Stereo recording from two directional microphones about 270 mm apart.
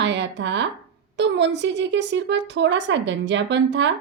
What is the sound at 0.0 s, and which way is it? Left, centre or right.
Speech, right.